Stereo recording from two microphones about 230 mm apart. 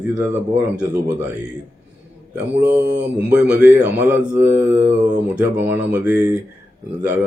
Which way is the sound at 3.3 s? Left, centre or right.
Centre.